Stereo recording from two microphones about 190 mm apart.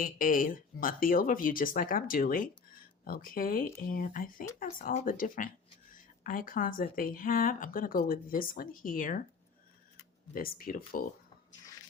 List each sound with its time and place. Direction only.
0.0 s a woman's voice: 45° left (ahead or behind)
10.3 s a woman's voice: 50° left (ahead or behind)